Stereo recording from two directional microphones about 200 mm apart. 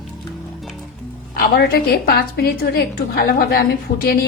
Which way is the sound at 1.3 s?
50° left (ahead or behind).